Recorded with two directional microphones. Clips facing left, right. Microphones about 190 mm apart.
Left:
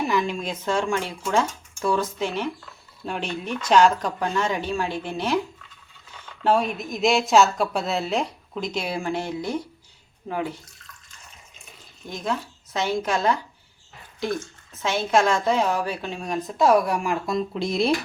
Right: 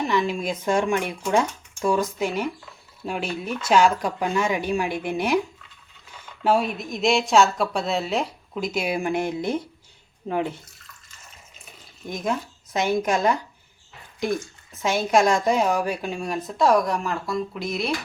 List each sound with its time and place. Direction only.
0.0 s a sound: centre (ahead or behind)
0.6 s speech: 15° right (ahead or behind)
12.0 s speech: 15° right (ahead or behind); by 17.9 s 30° left (ahead or behind)